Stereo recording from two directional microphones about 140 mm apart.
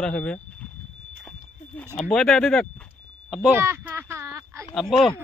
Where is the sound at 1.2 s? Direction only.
5° left (ahead or behind).